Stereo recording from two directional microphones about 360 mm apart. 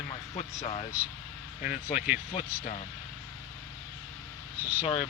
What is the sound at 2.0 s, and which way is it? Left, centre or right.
Speech, centre.